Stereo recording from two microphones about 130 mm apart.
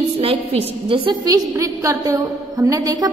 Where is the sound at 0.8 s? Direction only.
40° right (ahead or behind).